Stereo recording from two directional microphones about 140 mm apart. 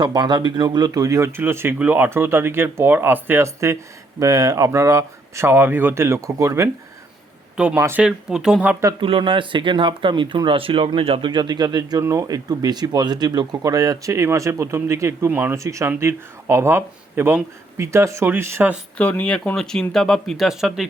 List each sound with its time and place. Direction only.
0.0 s speech: 30° right (ahead or behind)
7.5 s speech: 5° right (ahead or behind)
8.0 s speech: 5° right (ahead or behind)
9.0 s speech: 40° right (ahead or behind); by 18.8 s 15° right (ahead or behind)
18.9 s speech: 10° left (ahead or behind)